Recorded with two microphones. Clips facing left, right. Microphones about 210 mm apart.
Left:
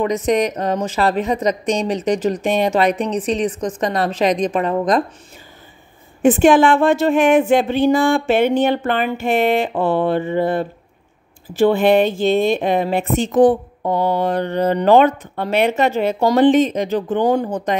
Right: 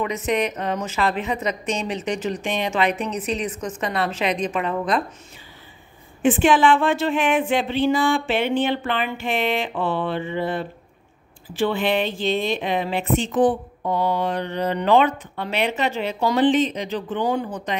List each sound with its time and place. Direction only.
0.0 s a woman's voice: 35° left (ahead or behind)
6.2 s speech: 45° left (ahead or behind)